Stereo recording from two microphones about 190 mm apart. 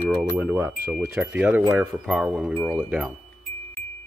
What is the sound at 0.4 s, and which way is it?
Speech, 10° right (ahead or behind).